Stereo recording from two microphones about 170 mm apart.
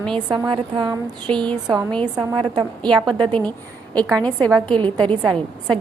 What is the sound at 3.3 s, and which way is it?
A woman's voice, 5° left (ahead or behind).